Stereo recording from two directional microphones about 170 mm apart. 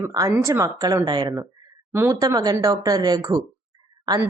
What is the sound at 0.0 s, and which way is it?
A woman's voice, 20° right (ahead or behind).